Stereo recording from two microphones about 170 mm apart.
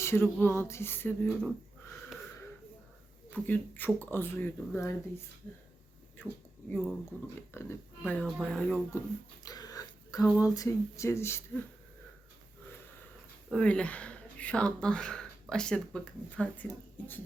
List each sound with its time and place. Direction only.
0.0 s speech: 15° left (ahead or behind)
3.2 s speech: 10° left (ahead or behind)
6.7 s speech: centre (ahead or behind)
7.5 s speech: 15° left (ahead or behind)
8.9 s a sound: 20° left (ahead or behind)
10.3 s speech: 20° left (ahead or behind)
13.5 s speech: 5° left (ahead or behind)